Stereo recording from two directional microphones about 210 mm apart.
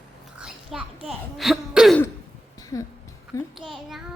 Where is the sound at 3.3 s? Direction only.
15° left (ahead or behind).